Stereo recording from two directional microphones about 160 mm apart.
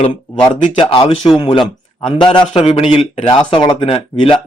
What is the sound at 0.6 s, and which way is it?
Speech, 35° left (ahead or behind).